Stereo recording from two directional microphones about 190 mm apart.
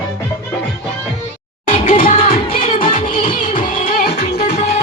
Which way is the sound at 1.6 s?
40° left (ahead or behind).